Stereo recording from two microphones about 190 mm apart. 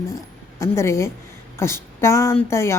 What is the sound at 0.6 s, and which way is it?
A woman's voice, 15° left (ahead or behind).